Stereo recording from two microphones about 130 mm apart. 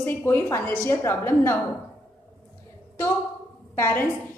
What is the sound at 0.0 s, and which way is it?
A woman's voice, 15° left (ahead or behind).